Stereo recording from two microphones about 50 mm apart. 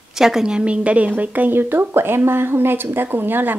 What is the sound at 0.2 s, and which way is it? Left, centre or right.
A woman's voice, centre.